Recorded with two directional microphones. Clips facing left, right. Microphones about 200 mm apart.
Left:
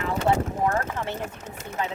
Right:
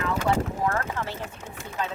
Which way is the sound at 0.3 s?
20° left (ahead or behind).